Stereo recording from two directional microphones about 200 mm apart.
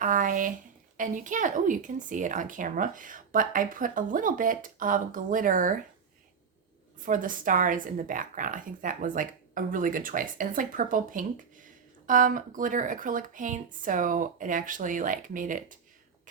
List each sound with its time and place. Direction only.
0.0 s speech: 40° right (ahead or behind)
7.0 s speech: 40° right (ahead or behind)